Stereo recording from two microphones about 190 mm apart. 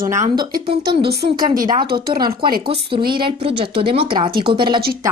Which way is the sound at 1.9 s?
50° right (ahead or behind).